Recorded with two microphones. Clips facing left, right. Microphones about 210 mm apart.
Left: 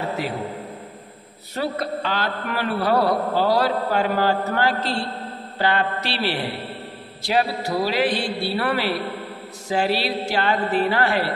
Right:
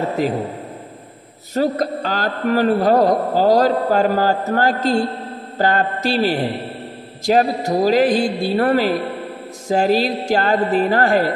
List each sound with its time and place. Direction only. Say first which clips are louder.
0.2 s a man's voice: right 8 dB; 45° right (ahead or behind)
1.5 s a man's voice: right 7 dB; 40° right (ahead or behind)